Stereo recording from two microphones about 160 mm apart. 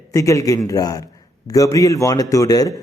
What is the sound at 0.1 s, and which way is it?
A man's voice, 20° left (ahead or behind).